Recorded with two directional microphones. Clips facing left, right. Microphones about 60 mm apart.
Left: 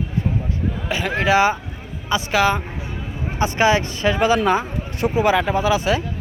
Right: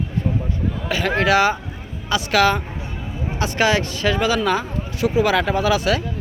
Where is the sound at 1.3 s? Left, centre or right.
Left.